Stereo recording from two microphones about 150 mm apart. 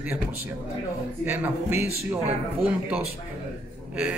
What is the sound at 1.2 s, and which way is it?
Speech, 10° right (ahead or behind).